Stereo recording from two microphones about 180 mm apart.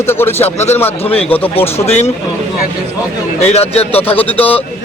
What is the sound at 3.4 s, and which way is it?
Speech, 35° left (ahead or behind).